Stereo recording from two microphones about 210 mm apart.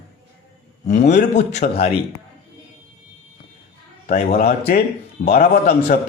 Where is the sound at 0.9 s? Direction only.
35° left (ahead or behind).